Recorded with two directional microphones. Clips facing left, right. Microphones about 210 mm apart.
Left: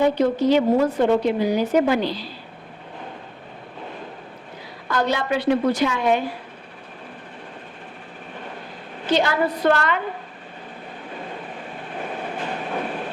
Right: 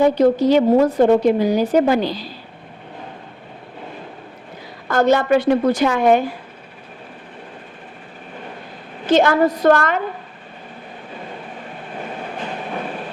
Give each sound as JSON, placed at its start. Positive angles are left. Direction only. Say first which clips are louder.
{"t": 0.0, "sound": "a woman's voice", "louder": "right 4 dB", "side_deg": -40}
{"t": 4.9, "sound": "a woman's voice", "louder": "right 7 dB", "side_deg": -45}
{"t": 9.0, "sound": "a woman's voice", "louder": "right 6 dB", "side_deg": -50}